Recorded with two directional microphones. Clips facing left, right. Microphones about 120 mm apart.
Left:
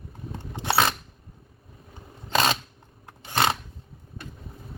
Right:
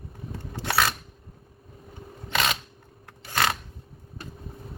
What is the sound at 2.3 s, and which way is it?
Camera, 35° left (ahead or behind).